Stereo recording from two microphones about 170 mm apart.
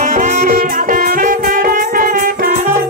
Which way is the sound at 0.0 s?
50° right (ahead or behind).